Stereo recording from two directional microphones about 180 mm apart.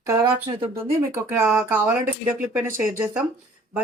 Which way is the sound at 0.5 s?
30° right (ahead or behind).